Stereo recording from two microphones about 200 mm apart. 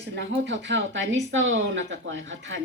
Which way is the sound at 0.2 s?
60° right (ahead or behind).